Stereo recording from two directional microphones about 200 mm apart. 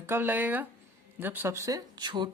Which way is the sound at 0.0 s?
10° right (ahead or behind).